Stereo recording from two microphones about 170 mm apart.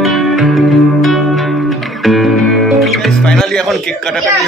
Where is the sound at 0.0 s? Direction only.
Centre (ahead or behind).